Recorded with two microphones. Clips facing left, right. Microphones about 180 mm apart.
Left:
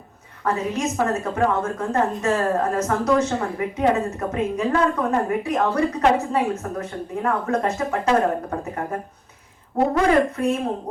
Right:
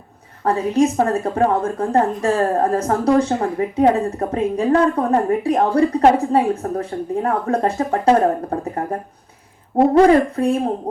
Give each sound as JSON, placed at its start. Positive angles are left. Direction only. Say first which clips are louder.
{"t": 0.4, "sound": "a woman's voice", "louder": "right 7 dB", "side_deg": -35}